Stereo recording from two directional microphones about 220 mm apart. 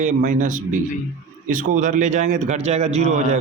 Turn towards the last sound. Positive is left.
turn(degrees=-30)  # may be behind; listen again after turning